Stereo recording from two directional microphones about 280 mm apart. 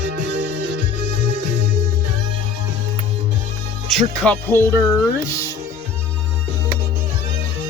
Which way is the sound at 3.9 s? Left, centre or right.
Centre.